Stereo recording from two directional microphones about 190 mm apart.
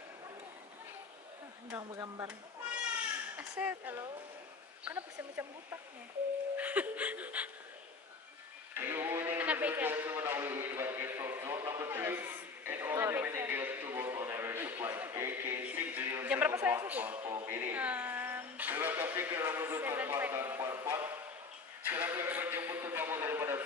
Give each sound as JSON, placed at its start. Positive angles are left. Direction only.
{"t": 1.8, "sound": "speech", "side_deg": -20}
{"t": 3.3, "sound": "speech", "side_deg": -10}
{"t": 6.5, "sound": "music", "side_deg": -10}
{"t": 8.7, "sound": "a sound", "side_deg": -10}
{"t": 17.5, "sound": "speech", "side_deg": -10}
{"t": 21.8, "sound": "a sound", "side_deg": -10}